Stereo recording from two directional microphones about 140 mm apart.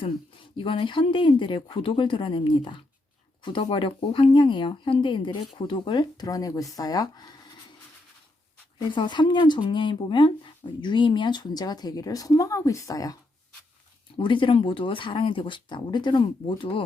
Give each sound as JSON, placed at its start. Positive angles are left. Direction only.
{"t": 0.5, "sound": "speech", "side_deg": 40}
{"t": 9.0, "sound": "speech", "side_deg": 35}
{"t": 14.2, "sound": "speech", "side_deg": 35}